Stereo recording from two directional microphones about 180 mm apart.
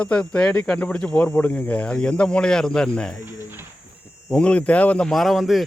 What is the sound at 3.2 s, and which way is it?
Cricket, 10° right (ahead or behind).